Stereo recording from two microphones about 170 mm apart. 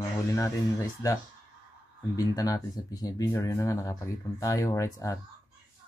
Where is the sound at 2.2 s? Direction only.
20° left (ahead or behind).